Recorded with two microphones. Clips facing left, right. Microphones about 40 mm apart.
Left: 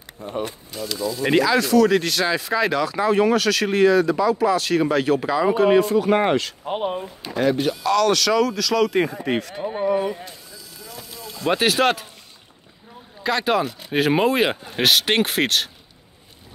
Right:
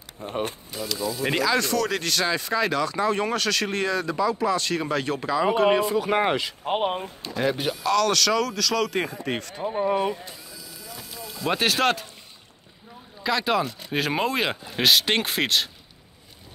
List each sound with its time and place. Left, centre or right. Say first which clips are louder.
0.2 s speech: left 1 dB; right
1.2 s speech: left 5 dB; centre
6.6 s speech: even; right
7.4 s speech: left 5 dB; centre
7.8 s speech: left 2 dB; centre
11.4 s speech: left 4 dB; centre
13.2 s speech: left 3 dB; centre